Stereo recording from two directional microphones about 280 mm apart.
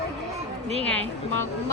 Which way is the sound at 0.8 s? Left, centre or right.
Centre.